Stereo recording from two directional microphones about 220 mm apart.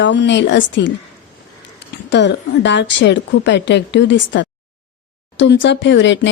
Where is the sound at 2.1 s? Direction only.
55° left (ahead or behind).